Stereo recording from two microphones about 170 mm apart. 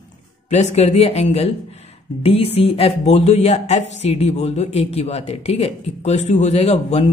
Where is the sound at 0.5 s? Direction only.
40° left (ahead or behind).